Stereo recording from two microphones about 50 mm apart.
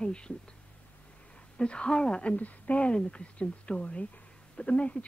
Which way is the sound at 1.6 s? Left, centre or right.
Centre.